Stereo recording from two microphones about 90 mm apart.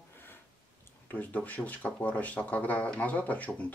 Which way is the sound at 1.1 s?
15° left (ahead or behind).